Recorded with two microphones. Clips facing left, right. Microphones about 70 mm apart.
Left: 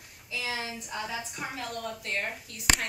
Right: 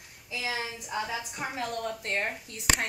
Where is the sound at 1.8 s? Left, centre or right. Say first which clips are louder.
Right 1 dB; right.